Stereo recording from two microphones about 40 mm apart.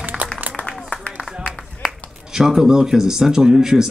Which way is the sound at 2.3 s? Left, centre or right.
Centre.